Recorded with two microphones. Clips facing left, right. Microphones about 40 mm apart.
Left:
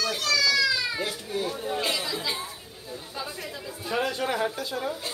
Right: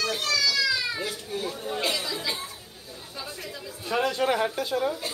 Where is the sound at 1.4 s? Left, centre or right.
Centre.